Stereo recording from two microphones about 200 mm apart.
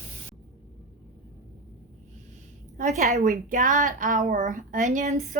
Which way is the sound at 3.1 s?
40° right (ahead or behind).